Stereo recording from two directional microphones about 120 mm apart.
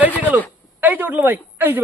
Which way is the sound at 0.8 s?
15° right (ahead or behind).